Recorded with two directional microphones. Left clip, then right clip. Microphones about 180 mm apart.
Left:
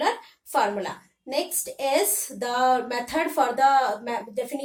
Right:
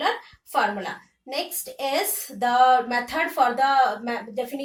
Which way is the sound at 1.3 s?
25° left (ahead or behind).